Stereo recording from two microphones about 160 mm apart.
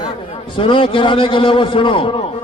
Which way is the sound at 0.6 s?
35° left (ahead or behind).